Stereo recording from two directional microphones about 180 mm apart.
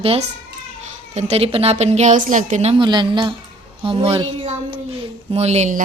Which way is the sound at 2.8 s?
25° right (ahead or behind).